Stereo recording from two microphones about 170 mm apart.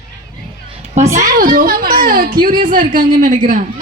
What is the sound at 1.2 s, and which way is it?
A woman's voice, 55° right (ahead or behind).